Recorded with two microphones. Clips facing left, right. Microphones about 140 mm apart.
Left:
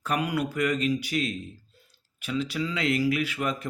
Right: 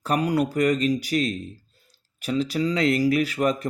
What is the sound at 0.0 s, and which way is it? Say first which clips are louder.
Speech: right 5 dB; 35° right (ahead or behind).